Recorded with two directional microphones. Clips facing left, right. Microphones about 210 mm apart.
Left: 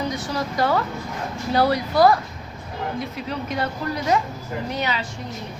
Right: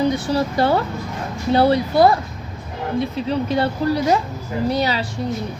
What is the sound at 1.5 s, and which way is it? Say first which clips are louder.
Speech: right 4 dB; 25° right (ahead or behind).